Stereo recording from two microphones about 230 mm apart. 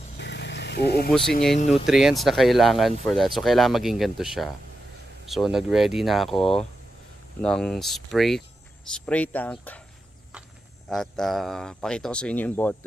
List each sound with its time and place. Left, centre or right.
0.2 s vehicle: left
1.9 s speech: centre
10.3 s insect: centre
10.9 s speech: centre